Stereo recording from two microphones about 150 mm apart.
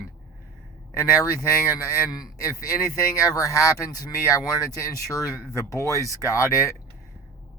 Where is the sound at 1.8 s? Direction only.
25° left (ahead or behind).